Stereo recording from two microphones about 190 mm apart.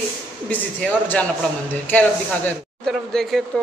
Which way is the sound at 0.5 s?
10° left (ahead or behind).